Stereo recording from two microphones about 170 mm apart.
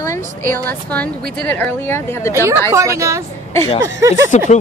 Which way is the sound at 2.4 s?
15° right (ahead or behind).